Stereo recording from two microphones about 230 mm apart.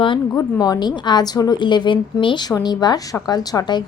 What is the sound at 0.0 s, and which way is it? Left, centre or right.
A woman's voice, centre.